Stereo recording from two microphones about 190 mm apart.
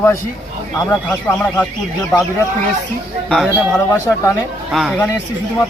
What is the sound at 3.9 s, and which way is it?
Speech, 15° left (ahead or behind).